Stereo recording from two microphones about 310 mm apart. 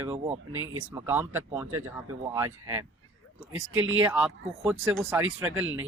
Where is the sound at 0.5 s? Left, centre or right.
Right.